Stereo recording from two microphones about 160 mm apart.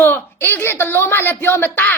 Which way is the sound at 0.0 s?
10° left (ahead or behind).